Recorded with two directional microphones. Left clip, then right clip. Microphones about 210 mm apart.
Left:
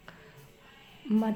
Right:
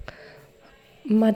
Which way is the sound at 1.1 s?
35° right (ahead or behind).